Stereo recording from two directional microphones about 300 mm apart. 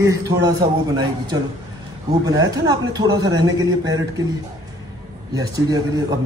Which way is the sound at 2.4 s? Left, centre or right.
Centre.